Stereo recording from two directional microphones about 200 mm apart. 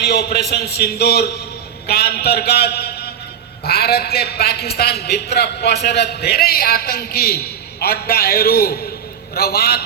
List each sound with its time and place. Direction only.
0.0 s a man's voice: 50° left (ahead or behind)